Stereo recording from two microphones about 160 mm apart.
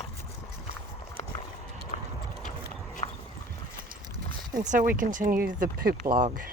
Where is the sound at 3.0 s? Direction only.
35° left (ahead or behind).